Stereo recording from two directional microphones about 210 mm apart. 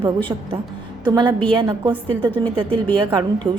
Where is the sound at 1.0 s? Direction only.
20° right (ahead or behind).